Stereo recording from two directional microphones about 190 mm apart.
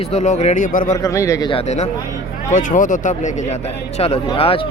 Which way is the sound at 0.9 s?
15° left (ahead or behind).